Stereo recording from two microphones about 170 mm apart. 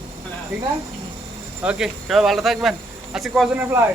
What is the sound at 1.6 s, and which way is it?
Speech, centre (ahead or behind).